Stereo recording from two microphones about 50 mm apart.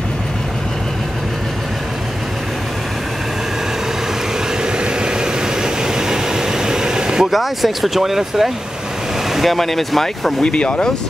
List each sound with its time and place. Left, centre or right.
4.7 s vehicle: centre
9.3 s speech: centre
10.4 s speech: left